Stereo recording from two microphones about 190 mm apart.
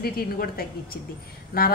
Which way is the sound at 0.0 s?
50° left (ahead or behind).